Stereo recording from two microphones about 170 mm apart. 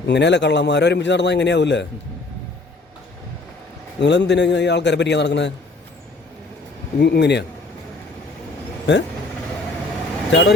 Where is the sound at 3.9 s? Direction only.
90° left.